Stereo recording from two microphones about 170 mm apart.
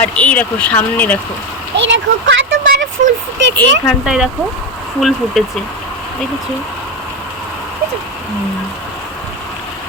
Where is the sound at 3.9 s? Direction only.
5° right (ahead or behind).